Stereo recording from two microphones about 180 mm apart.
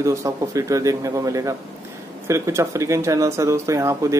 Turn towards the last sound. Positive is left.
turn(degrees=-15)  # may be behind; listen again after turning